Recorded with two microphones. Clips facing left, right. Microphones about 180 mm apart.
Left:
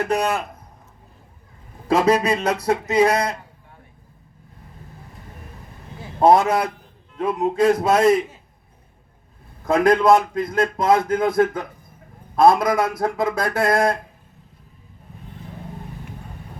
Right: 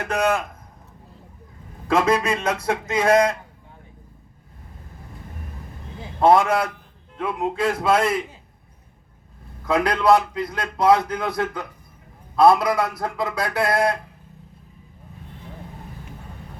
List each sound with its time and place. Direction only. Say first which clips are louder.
0.1 s speech: right 5 dB; 35° left (ahead or behind)
1.9 s speech: left 2 dB; 35° left (ahead or behind)
6.1 s speech: left 1 dB; 40° left (ahead or behind)
9.6 s a man's voice: left 3 dB; 45° left (ahead or behind)
12.4 s a man's voice: left 1 dB; 45° left (ahead or behind)